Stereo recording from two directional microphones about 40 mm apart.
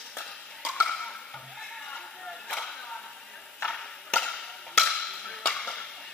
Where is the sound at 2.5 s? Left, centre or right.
Centre.